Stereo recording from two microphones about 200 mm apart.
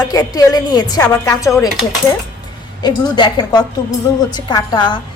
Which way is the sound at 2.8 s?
20° left (ahead or behind).